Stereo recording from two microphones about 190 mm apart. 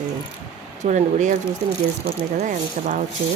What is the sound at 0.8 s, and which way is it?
Speech, 40° right (ahead or behind).